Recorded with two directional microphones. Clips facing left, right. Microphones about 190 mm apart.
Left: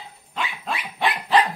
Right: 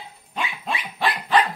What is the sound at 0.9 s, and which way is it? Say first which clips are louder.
Dog: left 1 dB; 15° left (ahead or behind).